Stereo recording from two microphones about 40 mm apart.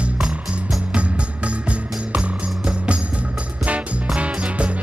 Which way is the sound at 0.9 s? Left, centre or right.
Right.